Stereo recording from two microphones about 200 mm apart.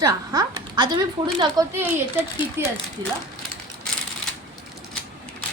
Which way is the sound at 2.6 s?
10° right (ahead or behind).